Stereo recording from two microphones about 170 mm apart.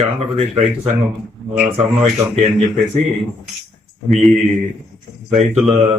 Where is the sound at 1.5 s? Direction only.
5° right (ahead or behind).